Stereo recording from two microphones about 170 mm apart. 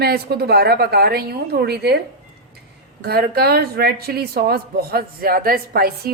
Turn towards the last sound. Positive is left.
turn(degrees=-60)  # may be behind; listen again after turning